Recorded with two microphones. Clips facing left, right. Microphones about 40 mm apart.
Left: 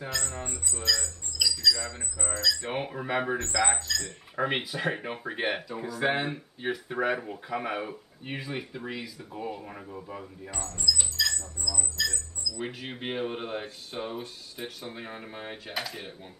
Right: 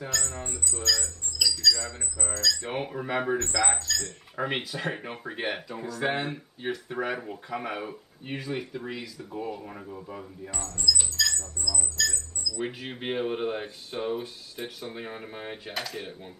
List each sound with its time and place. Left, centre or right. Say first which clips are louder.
0.0 s speech: right 1 dB; centre
1.4 s a sound: right 1 dB; centre
2.3 s speech: even; centre
10.5 s speech: even; left
10.8 s rodents: right 2 dB; centre
11.7 s speech: right 1 dB; centre
12.0 s speech: right 1 dB; centre